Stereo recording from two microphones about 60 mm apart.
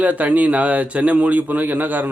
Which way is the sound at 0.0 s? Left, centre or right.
Right.